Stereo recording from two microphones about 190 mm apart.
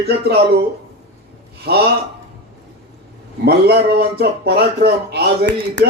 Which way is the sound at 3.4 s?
60° right (ahead or behind).